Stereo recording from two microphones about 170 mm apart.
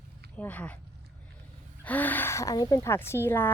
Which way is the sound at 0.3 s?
10° left (ahead or behind).